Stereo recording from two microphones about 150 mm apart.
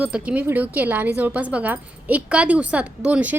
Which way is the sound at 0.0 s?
10° right (ahead or behind).